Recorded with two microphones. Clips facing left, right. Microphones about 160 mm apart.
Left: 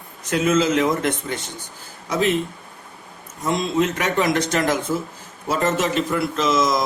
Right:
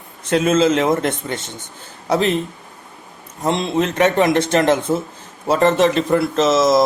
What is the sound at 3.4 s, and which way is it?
A man's voice, 25° right (ahead or behind).